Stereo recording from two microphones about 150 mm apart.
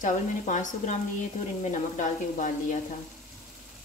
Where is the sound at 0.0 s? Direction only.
55° left (ahead or behind).